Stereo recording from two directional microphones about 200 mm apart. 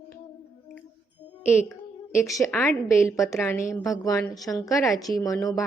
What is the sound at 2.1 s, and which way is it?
A woman's voice, 15° left (ahead or behind).